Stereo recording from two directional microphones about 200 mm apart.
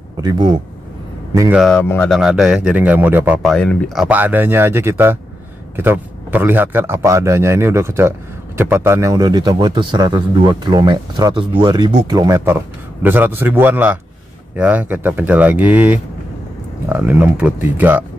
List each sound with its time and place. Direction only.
0.2 s speech: 20° right (ahead or behind)
1.6 s speech: 5° left (ahead or behind)
2.1 s a man's voice: centre (ahead or behind)
3.4 s a man's voice: 5° left (ahead or behind)